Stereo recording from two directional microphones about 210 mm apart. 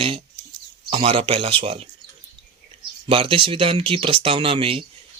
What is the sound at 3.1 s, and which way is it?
Speech, 25° right (ahead or behind).